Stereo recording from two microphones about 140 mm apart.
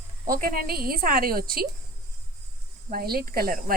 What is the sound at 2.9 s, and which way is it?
Speech, 90° right.